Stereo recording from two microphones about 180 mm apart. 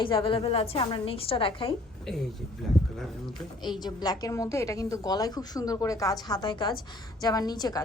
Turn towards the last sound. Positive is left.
turn(degrees=20)  # may be behind; listen again after turning